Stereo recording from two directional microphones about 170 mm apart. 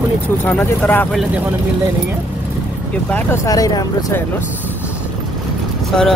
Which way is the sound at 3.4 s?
20° left (ahead or behind).